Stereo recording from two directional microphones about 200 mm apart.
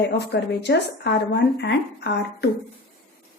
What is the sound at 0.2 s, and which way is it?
Speech, 55° left (ahead or behind).